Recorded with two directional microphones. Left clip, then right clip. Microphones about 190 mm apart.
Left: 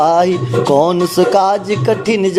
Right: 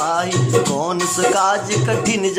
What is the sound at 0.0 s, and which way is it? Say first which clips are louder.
Music: left 7 dB; 30° left (ahead or behind).